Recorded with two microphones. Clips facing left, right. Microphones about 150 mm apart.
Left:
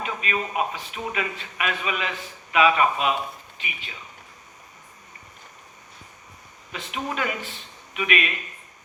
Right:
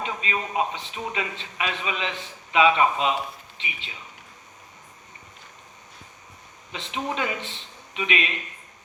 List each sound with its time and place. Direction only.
0.0 s a man's voice: 25° right (ahead or behind)
6.7 s speech: 25° right (ahead or behind)